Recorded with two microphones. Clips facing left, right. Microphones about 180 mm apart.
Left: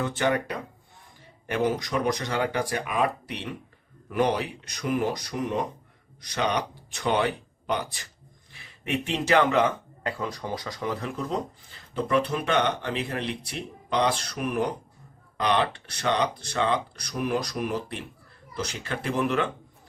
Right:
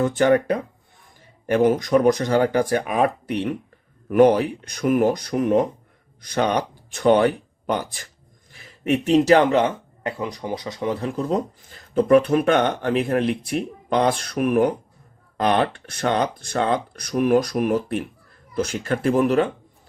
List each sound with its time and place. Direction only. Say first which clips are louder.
0.0 s speech: right 8 dB; 45° right (ahead or behind)